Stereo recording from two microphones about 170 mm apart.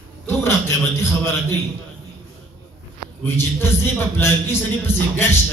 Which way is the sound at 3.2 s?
15° left (ahead or behind).